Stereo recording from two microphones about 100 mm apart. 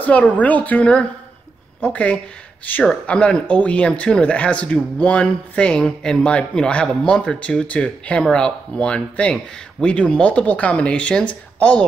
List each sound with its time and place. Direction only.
0.0 s speech: 15° left (ahead or behind)